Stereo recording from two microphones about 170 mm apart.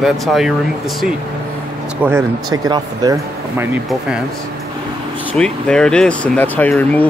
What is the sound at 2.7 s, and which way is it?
Speech, 25° right (ahead or behind).